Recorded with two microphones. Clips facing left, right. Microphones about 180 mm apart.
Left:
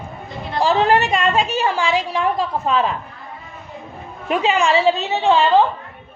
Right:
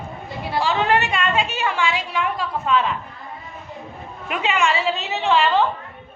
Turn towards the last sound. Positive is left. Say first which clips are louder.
# left 4 dB
turn(degrees=30)  # may be behind; listen again after turning